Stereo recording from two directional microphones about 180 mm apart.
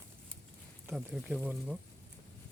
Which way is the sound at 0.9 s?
5° right (ahead or behind).